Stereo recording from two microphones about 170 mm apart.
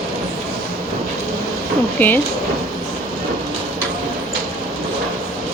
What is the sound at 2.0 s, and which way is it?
Speech, 10° left (ahead or behind).